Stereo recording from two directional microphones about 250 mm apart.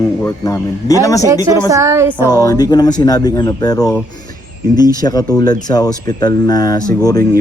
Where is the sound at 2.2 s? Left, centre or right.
Centre.